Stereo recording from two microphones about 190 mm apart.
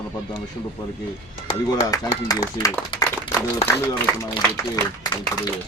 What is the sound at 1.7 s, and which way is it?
Speech, 20° left (ahead or behind).